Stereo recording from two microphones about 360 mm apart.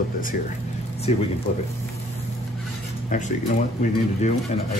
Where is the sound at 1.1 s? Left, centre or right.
Centre.